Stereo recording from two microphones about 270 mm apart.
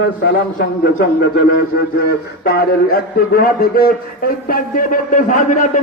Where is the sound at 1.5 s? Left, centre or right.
Left.